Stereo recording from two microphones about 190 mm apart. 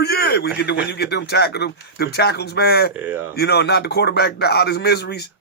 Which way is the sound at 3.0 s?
10° right (ahead or behind).